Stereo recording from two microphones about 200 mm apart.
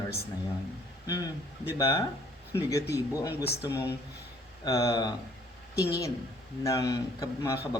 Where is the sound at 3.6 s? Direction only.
10° right (ahead or behind).